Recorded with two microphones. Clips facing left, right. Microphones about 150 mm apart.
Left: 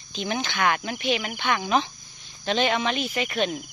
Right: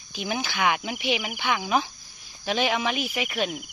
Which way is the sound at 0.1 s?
10° right (ahead or behind).